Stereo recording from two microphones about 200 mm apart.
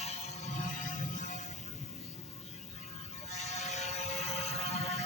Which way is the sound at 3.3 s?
35° left (ahead or behind).